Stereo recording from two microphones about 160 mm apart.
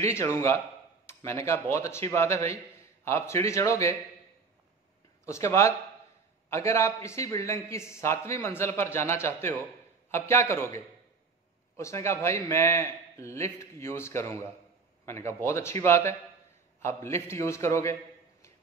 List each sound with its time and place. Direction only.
0.0 s a man's voice: 20° left (ahead or behind)
5.2 s a man's voice: 20° left (ahead or behind)
11.7 s a man's voice: 15° left (ahead or behind)